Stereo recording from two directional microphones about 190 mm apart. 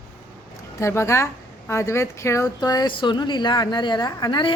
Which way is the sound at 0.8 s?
15° left (ahead or behind).